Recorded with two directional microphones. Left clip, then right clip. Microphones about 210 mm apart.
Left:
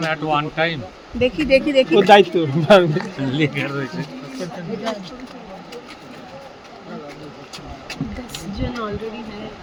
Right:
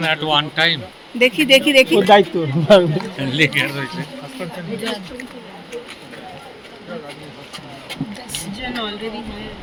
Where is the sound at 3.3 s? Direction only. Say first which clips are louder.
Right 6 dB; 20° left (ahead or behind).